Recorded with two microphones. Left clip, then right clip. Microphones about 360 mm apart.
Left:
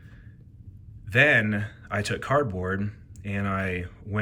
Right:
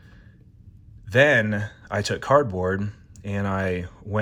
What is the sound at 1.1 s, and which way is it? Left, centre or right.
Speech, centre.